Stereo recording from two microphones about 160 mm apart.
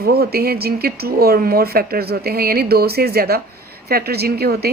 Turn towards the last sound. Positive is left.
turn(degrees=-80)